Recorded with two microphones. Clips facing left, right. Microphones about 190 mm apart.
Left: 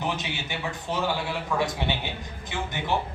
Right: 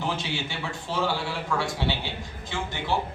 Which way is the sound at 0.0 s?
20° left (ahead or behind).